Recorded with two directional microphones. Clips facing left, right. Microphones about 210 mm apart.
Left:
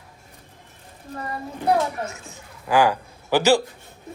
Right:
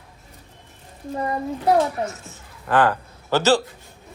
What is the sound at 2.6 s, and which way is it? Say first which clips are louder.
Speech: even; 10° left (ahead or behind).